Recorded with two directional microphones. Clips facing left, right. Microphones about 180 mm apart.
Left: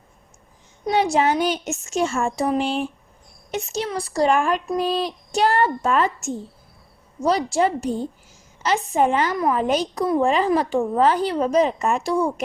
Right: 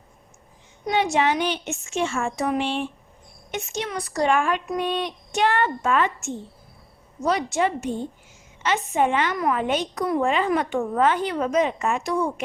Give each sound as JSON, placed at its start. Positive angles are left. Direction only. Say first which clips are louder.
{"t": 0.9, "sound": "a woman's voice", "louder": "left 2 dB", "side_deg": 35}